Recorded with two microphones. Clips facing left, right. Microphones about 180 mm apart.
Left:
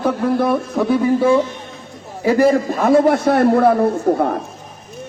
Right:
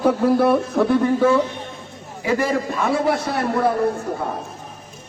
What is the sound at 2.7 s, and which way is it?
A man's voice, 55° left (ahead or behind).